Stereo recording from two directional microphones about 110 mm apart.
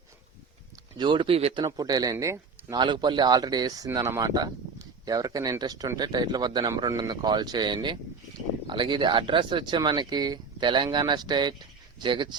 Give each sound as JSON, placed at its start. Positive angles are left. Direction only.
{"t": 0.9, "sound": "speech", "side_deg": -45}
{"t": 2.7, "sound": "speech", "side_deg": -45}